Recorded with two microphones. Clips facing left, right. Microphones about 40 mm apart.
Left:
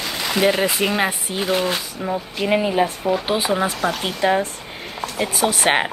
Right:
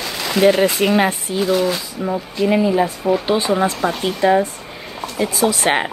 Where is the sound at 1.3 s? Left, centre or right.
Left.